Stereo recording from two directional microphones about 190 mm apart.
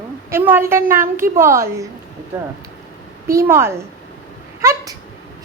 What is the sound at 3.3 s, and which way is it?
Speech, 15° right (ahead or behind).